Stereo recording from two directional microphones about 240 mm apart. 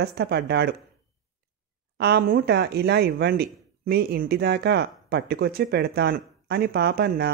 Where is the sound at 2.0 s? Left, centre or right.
Right.